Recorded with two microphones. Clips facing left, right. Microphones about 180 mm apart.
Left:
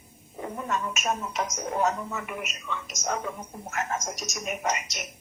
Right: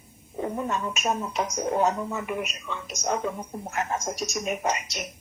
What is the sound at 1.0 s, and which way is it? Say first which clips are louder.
Speech: right 4 dB; 30° right (ahead or behind).